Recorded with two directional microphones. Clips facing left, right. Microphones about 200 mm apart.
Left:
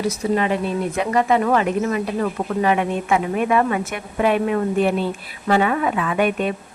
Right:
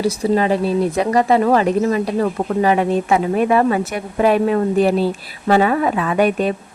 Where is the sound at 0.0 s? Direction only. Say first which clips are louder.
Right 4 dB; 35° right (ahead or behind).